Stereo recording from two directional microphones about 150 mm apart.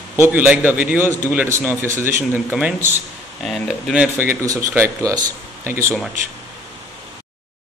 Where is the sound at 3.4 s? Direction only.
Centre (ahead or behind); by 5.9 s 20° right (ahead or behind).